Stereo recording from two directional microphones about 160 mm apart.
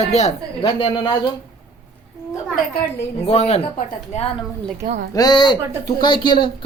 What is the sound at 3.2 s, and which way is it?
Speech, 40° left (ahead or behind).